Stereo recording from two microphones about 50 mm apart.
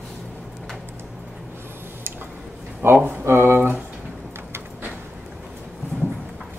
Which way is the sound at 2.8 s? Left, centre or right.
Right.